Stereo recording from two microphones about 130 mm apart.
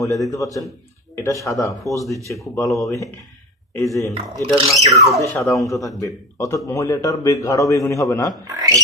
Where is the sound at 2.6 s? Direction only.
Centre (ahead or behind).